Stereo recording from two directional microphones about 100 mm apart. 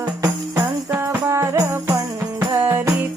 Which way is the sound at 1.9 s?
35° right (ahead or behind).